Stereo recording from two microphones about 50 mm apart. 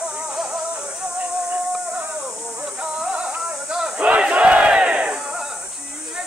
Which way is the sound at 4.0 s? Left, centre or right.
Right.